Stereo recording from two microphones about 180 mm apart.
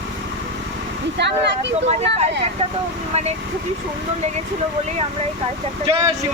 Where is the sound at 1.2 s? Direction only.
75° right (ahead or behind).